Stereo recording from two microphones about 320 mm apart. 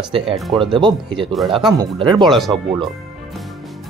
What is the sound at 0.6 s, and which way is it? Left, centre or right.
Speech, centre.